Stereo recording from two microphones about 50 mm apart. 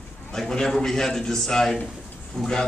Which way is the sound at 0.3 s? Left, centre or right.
Centre.